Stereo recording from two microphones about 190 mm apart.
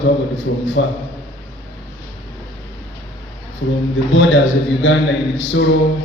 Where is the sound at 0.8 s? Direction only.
80° left.